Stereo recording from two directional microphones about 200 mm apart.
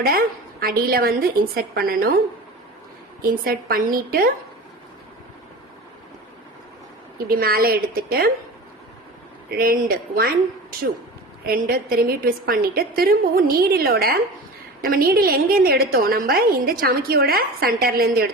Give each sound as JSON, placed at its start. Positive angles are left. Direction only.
{"t": 0.0, "sound": "a woman's voice", "side_deg": -50}
{"t": 3.2, "sound": "a woman's voice", "side_deg": -50}
{"t": 7.3, "sound": "a woman's voice", "side_deg": -50}
{"t": 9.6, "sound": "a woman's voice", "side_deg": -50}